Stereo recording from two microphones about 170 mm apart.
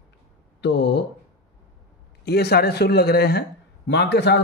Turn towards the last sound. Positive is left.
turn(degrees=85)